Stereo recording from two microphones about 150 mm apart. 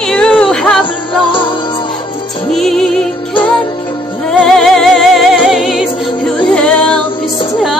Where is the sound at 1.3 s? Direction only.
35° left (ahead or behind).